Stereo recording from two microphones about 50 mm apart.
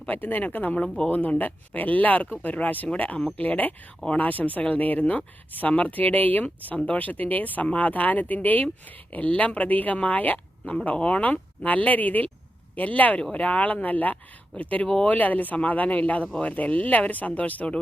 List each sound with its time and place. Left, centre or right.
0.1 s speech: left